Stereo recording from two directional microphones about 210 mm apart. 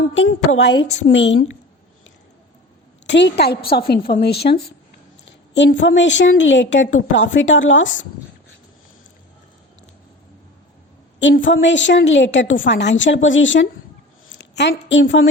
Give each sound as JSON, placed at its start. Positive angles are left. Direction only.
{"t": 0.1, "sound": "a woman's voice", "side_deg": 60}
{"t": 3.1, "sound": "a woman's voice", "side_deg": 55}
{"t": 11.2, "sound": "a woman's voice", "side_deg": 60}